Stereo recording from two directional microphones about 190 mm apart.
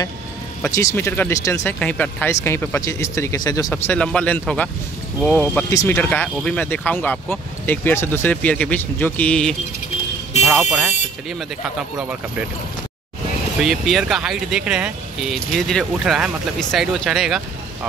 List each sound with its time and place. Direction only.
0.6 s speech: 15° left (ahead or behind)
12.0 s speech: 5° right (ahead or behind)
13.6 s speech: centre (ahead or behind)